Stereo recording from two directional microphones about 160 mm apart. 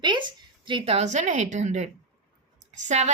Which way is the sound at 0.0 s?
30° right (ahead or behind).